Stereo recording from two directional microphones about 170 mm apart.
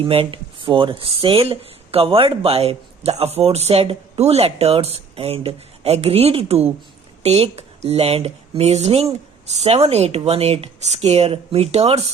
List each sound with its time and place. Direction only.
0.0 s speech: 30° right (ahead or behind)